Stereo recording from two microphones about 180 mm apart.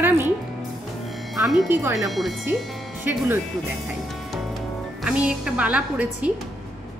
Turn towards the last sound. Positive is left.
turn(degrees=-5)  # may be behind; listen again after turning